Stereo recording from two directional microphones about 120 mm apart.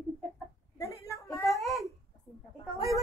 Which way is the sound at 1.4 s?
Centre (ahead or behind).